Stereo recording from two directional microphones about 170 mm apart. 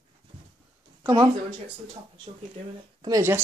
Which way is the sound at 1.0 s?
25° right (ahead or behind).